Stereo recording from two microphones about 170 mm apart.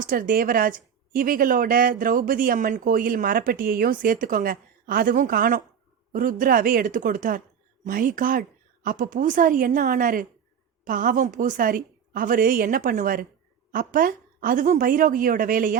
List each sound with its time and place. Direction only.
0.0 s a woman's voice: 55° right (ahead or behind)